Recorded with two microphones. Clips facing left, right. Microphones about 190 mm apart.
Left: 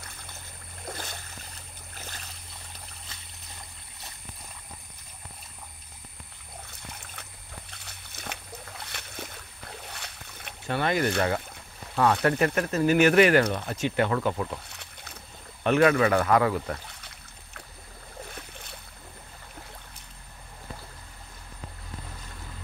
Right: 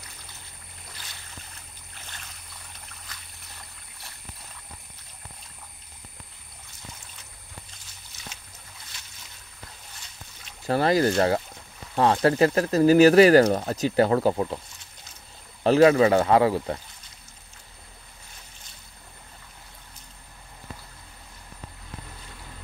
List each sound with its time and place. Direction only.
0.8 s a sound: 50° left (ahead or behind)
2.0 s boat: 40° left (ahead or behind)
7.7 s boat: 65° left (ahead or behind)
10.7 s speech: 35° right (ahead or behind)
14.7 s boat: 65° left (ahead or behind)
15.6 s speech: 30° right (ahead or behind)
18.3 s boat: 60° left (ahead or behind)